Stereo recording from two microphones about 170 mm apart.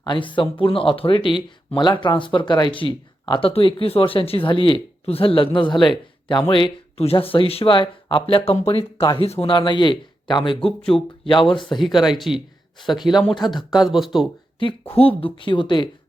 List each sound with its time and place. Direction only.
0.0 s speech: 30° left (ahead or behind)
11.9 s speech: centre (ahead or behind)
13.2 s speech: 25° left (ahead or behind)
13.7 s speech: centre (ahead or behind)
14.6 s speech: 30° left (ahead or behind)